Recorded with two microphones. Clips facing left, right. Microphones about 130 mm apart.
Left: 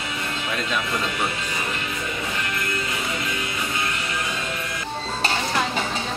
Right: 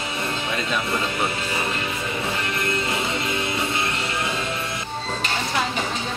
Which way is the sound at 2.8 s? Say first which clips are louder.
Right 3 dB; 30° right (ahead or behind).